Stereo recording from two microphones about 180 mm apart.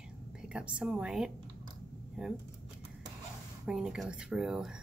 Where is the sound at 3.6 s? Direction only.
5° right (ahead or behind).